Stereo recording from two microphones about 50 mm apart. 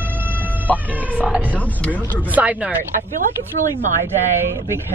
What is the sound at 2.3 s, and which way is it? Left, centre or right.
Speech, right.